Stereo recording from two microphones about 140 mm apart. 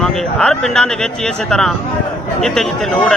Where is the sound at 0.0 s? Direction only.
5° left (ahead or behind).